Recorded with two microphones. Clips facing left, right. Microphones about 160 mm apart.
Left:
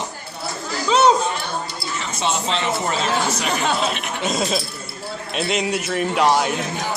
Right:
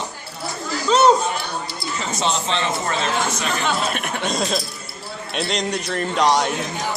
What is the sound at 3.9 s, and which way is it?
Speech, 50° right (ahead or behind).